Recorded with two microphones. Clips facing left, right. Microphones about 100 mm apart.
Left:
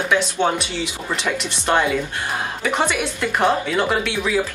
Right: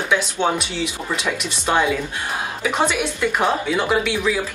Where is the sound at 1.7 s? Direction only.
5° right (ahead or behind).